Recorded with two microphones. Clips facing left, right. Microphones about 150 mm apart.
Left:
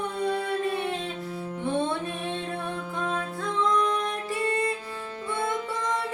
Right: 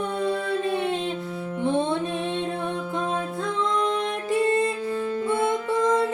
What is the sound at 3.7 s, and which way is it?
Music, 25° right (ahead or behind).